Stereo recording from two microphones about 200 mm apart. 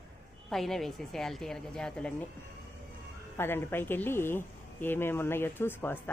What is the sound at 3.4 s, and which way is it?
Speech, 10° left (ahead or behind).